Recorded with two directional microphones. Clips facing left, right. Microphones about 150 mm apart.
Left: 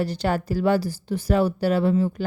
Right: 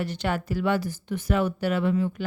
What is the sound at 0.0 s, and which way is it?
A woman's voice, 35° left (ahead or behind).